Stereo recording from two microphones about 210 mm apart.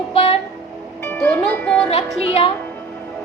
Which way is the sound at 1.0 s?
10° left (ahead or behind).